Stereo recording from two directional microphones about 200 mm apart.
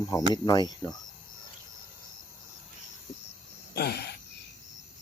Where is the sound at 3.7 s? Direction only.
50° left (ahead or behind).